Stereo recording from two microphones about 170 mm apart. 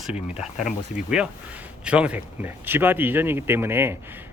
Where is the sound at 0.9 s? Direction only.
5° right (ahead or behind).